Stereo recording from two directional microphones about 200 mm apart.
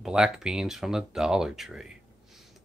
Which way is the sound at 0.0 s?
5° right (ahead or behind).